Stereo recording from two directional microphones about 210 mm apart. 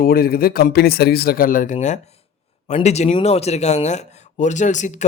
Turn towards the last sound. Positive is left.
turn(degrees=35)  # may be behind; listen again after turning